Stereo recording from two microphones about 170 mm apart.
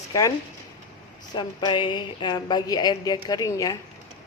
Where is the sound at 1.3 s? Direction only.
25° left (ahead or behind).